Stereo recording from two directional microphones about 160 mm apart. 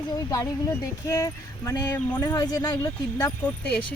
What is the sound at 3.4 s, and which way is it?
Speech, 10° left (ahead or behind).